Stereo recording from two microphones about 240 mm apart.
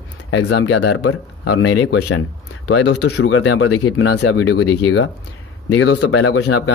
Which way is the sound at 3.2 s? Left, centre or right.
Left.